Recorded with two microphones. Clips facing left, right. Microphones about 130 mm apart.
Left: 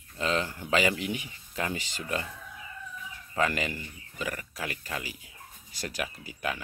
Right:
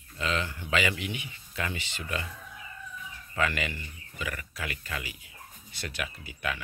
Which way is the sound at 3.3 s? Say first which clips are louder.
Left 2 dB; 35° left (ahead or behind).